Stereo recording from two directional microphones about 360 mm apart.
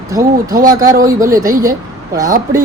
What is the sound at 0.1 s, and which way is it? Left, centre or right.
Speech, centre.